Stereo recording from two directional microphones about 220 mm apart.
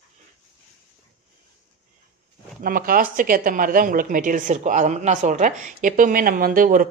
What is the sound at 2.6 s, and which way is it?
A woman's voice, 40° right (ahead or behind).